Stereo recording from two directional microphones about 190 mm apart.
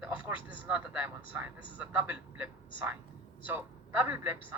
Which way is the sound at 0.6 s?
5° right (ahead or behind).